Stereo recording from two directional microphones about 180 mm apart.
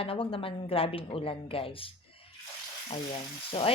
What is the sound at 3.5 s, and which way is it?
Speech, 30° left (ahead or behind).